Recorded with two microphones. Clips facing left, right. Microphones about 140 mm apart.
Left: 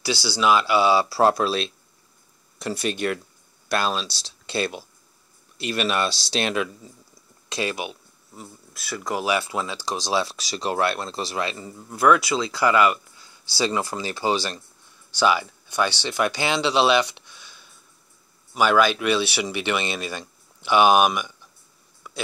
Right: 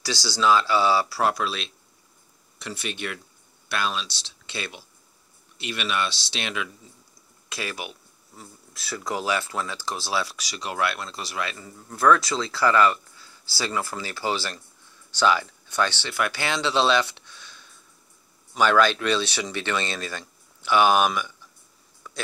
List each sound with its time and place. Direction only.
0.0 s speech: 10° left (ahead or behind)
1.0 s speech: 30° left (ahead or behind)
7.4 s speech: 20° left (ahead or behind)
8.9 s speech: 5° left (ahead or behind)
9.2 s speech: 15° left (ahead or behind)
11.9 s speech: 15° left (ahead or behind)
22.0 s a sound: 15° left (ahead or behind)